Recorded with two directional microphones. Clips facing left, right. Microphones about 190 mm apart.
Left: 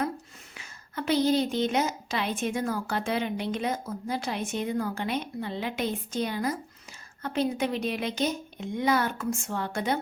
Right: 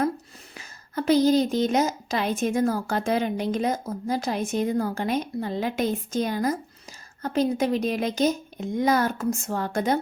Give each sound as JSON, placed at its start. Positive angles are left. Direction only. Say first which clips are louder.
{"t": 0.5, "sound": "a woman's voice", "louder": "right 6 dB", "side_deg": -40}